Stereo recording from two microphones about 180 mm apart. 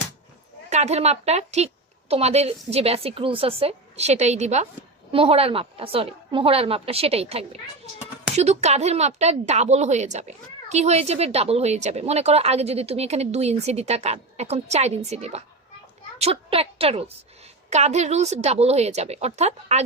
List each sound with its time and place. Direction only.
0.7 s speech: 35° right (ahead or behind)